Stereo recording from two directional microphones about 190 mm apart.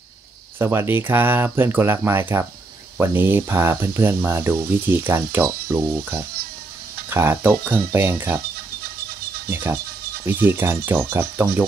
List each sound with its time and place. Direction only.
0.6 s speech: 10° right (ahead or behind)
9.5 s speech: 15° right (ahead or behind)